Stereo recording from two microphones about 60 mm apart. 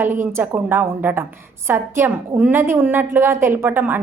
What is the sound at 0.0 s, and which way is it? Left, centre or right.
A woman's voice, right.